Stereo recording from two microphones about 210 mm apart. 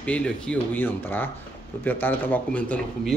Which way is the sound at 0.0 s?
5° left (ahead or behind).